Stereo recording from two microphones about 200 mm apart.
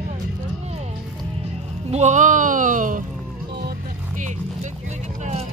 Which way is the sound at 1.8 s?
35° right (ahead or behind).